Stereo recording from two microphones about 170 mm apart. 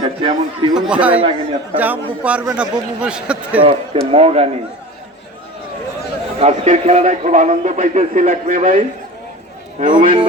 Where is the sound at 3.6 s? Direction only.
35° right (ahead or behind).